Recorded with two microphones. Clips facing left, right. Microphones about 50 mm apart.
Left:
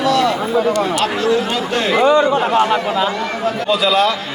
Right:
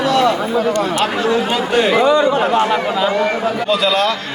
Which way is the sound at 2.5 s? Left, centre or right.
Centre.